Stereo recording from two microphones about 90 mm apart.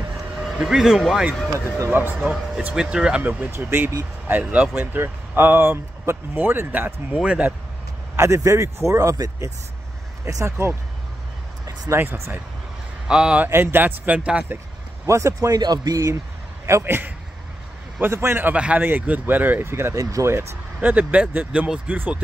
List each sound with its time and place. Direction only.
0.6 s speech: 5° right (ahead or behind)
1.9 s a man's voice: 20° right (ahead or behind)
2.1 s a man's voice: 10° right (ahead or behind)
8.2 s speech: 35° right (ahead or behind)
11.6 s a sound: 40° right (ahead or behind)
12.0 s a man's voice: 20° right (ahead or behind)
13.5 s a man's voice: 25° right (ahead or behind)
15.0 s speech: 35° right (ahead or behind)
15.6 s speech: 50° right (ahead or behind)
16.6 s a man's voice: 30° right (ahead or behind)
20.8 s a man's voice: 15° right (ahead or behind)